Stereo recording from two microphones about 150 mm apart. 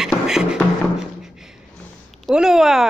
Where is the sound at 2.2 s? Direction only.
5° right (ahead or behind).